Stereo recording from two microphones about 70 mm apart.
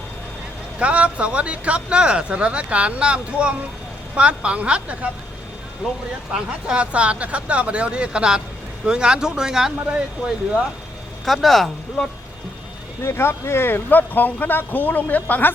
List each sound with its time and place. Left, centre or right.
0.8 s speech: centre
6.7 s speech: centre
11.3 s speech: centre
13.0 s speech: left